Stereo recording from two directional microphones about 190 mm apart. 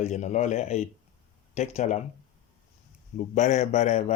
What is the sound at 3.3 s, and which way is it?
Speech, 40° left (ahead or behind).